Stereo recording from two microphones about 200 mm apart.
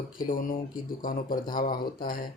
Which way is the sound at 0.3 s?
45° left (ahead or behind).